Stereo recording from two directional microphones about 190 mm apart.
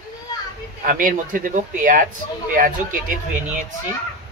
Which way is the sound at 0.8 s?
45° right (ahead or behind).